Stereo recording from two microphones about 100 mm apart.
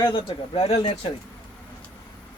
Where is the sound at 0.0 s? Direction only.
50° left (ahead or behind).